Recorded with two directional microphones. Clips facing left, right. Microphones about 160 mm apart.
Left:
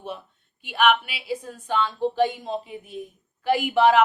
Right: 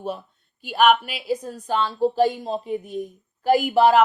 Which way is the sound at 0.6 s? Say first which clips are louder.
Right 3 dB; 40° right (ahead or behind).